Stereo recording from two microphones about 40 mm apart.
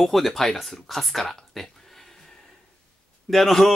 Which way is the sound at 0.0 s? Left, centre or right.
Centre.